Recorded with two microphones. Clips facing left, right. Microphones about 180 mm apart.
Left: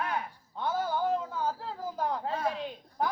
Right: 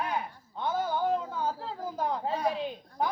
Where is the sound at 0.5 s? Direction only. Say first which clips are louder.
Right 1 dB; 10° left (ahead or behind).